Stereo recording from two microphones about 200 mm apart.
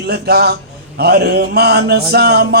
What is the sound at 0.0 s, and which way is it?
Speech, 55° right (ahead or behind).